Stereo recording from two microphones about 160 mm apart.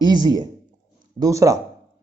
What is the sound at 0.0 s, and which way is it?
Speech, 25° right (ahead or behind).